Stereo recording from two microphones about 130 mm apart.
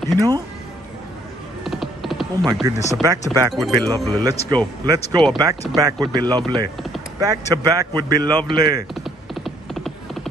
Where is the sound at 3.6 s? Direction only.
30° right (ahead or behind).